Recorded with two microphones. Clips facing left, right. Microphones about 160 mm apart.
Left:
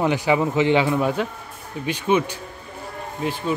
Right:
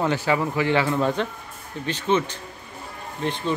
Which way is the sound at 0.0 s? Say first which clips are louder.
Left 3 dB; 15° left (ahead or behind).